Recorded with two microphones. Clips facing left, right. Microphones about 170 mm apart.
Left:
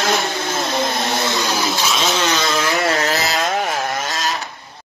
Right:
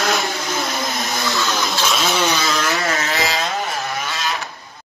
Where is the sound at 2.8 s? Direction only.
35° left (ahead or behind).